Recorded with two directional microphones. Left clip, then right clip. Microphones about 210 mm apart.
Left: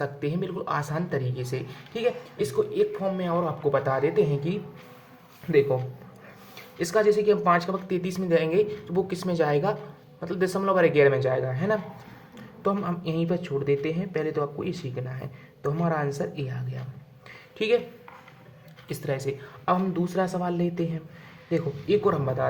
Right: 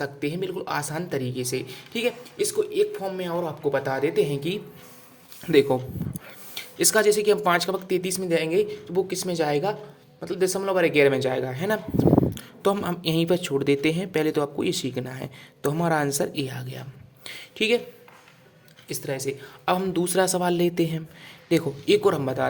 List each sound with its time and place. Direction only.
0.0 s speech: 25° right (ahead or behind)
5.5 s a man's voice: 45° right (ahead or behind)
12.3 s a sound: 40° right (ahead or behind)
13.1 s speech: 40° right (ahead or behind)
17.6 s speech: 25° right (ahead or behind)
18.9 s speech: 15° right (ahead or behind)
19.6 s speech: 35° right (ahead or behind)